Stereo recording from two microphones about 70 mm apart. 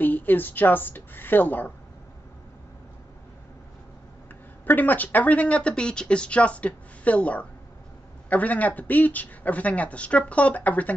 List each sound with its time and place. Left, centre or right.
0.0 s a woman's voice: left
4.6 s speech: left